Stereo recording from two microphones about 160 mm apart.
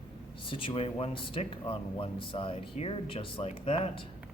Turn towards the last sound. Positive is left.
turn(degrees=35)  # may be behind; listen again after turning